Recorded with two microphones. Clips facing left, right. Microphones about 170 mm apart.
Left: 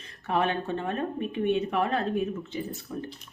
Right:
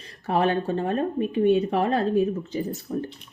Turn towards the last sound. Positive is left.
turn(degrees=-40)  # may be behind; listen again after turning